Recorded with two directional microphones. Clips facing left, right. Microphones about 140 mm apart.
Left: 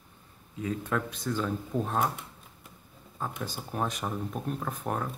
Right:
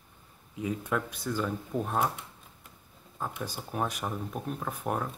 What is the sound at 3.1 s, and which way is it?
Speech, 5° right (ahead or behind).